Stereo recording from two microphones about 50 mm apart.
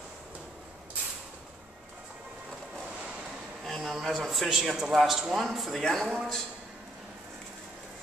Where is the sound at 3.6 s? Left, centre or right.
Centre.